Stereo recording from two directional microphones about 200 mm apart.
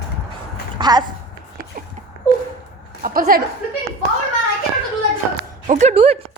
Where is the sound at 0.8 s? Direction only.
20° right (ahead or behind).